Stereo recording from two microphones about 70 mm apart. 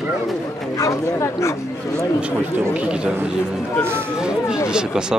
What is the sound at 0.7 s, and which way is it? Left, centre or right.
Speech, left.